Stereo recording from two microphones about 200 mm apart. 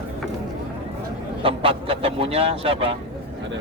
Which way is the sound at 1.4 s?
25° right (ahead or behind).